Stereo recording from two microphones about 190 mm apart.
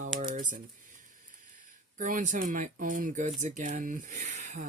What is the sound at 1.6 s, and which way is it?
Speech, 45° right (ahead or behind).